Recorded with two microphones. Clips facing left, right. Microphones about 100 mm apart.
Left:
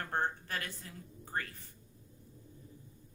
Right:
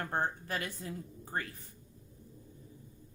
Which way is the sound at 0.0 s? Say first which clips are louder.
Right 1 dB; 15° right (ahead or behind).